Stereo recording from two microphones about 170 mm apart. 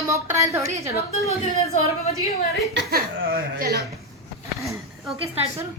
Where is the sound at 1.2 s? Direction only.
35° left (ahead or behind).